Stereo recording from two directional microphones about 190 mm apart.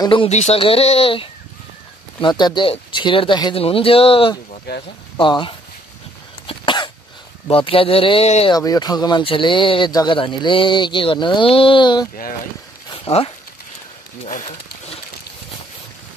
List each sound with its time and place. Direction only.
0.0 s speech: 25° left (ahead or behind)
6.4 s cough: 25° left (ahead or behind)
7.4 s speech: 30° left (ahead or behind)
8.5 s speech: 20° left (ahead or behind)